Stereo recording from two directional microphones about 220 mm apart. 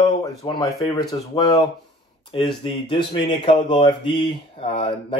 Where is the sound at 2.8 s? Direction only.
25° left (ahead or behind).